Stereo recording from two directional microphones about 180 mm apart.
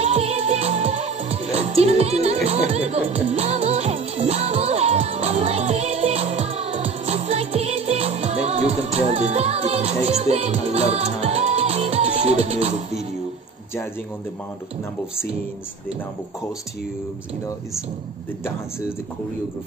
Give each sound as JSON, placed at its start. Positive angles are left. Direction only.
{"t": 0.0, "sound": "music", "side_deg": -35}